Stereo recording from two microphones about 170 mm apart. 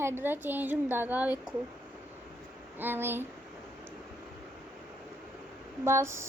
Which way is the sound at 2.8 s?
10° right (ahead or behind).